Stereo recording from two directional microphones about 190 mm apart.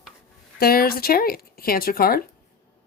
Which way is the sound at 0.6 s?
50° left (ahead or behind).